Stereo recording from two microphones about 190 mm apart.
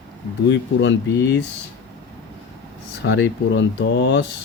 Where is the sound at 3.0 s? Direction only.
75° left (ahead or behind).